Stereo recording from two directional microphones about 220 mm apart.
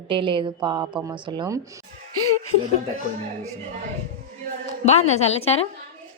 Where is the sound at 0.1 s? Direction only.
20° right (ahead or behind).